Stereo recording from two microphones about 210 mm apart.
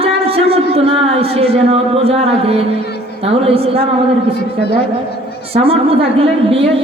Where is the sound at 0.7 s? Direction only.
30° right (ahead or behind).